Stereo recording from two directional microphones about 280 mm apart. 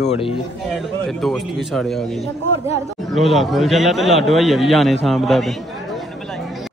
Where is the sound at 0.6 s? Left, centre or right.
Centre.